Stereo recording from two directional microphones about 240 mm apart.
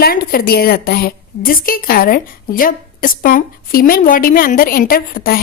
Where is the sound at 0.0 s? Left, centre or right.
Left.